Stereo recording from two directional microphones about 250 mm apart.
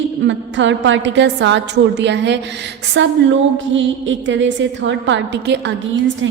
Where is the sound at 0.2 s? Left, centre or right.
Right.